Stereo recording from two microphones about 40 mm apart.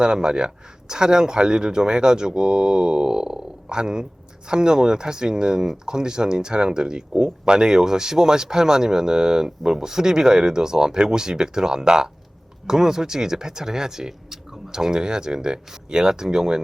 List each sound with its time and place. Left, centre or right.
0.0 s speech: right